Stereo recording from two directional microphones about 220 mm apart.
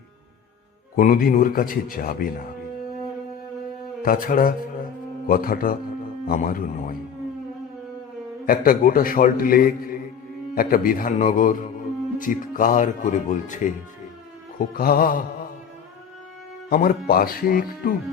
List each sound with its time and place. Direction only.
0.9 s a man's voice: 40° left (ahead or behind)
4.0 s a man's voice: 40° left (ahead or behind)
8.4 s a man's voice: 40° left (ahead or behind)
14.7 s a man's voice: 40° left (ahead or behind)
16.6 s a man's voice: 45° left (ahead or behind)